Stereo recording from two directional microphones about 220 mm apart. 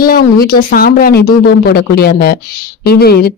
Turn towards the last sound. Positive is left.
turn(degrees=45)  # may be behind; listen again after turning